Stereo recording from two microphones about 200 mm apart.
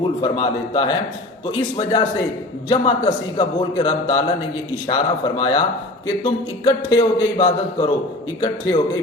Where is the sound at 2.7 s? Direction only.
25° left (ahead or behind).